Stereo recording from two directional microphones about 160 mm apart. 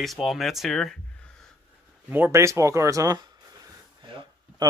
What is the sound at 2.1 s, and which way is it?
Speech, 10° right (ahead or behind).